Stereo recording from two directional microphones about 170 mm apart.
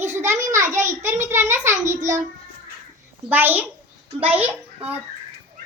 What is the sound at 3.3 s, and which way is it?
A child's voice, 10° right (ahead or behind).